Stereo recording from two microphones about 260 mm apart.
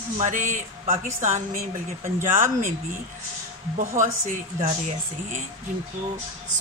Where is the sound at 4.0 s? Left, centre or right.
Right.